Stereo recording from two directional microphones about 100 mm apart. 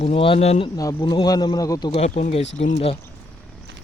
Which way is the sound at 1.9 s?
90° left.